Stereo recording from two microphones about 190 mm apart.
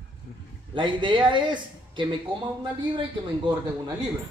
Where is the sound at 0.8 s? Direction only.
25° right (ahead or behind).